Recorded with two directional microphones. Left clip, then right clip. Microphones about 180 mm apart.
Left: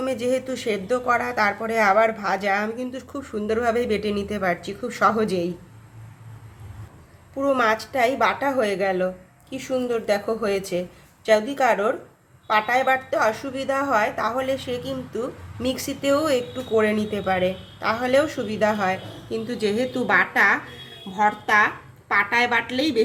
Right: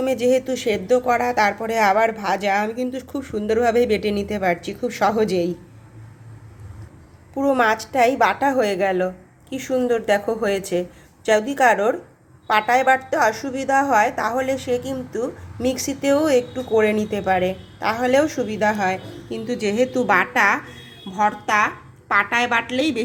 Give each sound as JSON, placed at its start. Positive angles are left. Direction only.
{"t": 0.0, "sound": "a woman's voice", "side_deg": -15}
{"t": 7.3, "sound": "a woman's voice", "side_deg": -15}